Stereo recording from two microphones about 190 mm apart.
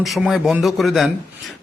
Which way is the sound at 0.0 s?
Centre (ahead or behind).